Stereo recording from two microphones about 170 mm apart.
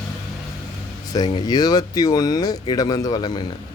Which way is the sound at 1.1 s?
25° left (ahead or behind).